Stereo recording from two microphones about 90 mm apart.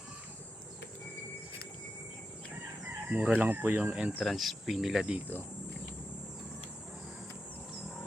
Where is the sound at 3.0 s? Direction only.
15° right (ahead or behind).